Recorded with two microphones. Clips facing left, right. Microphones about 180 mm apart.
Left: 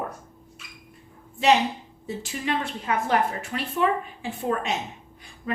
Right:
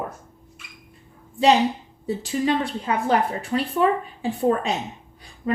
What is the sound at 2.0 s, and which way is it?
A woman's voice, 35° right (ahead or behind).